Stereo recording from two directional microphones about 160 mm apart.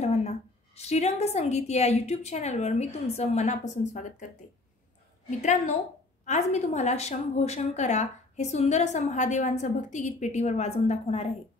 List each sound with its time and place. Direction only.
0.7 s a woman's voice: 45° left (ahead or behind)
5.4 s a woman's voice: 50° left (ahead or behind)